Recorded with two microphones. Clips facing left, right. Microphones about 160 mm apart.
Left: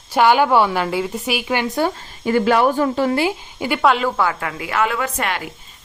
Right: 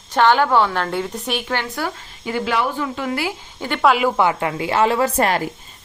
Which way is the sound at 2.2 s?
50° left (ahead or behind).